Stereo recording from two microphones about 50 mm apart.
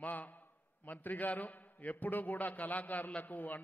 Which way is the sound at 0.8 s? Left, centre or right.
Left.